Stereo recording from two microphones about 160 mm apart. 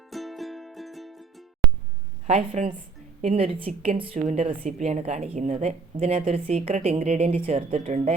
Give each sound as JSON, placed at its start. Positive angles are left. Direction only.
{"t": 0.1, "sound": "music", "side_deg": 0}
{"t": 2.2, "sound": "a woman's voice", "side_deg": -45}